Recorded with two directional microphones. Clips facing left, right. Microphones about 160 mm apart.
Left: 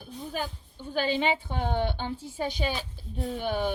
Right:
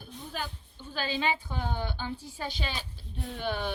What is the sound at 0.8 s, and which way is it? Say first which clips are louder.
Speech: left 5 dB; 20° left (ahead or behind).